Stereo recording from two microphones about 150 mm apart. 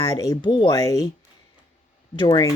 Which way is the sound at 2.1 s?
30° left (ahead or behind).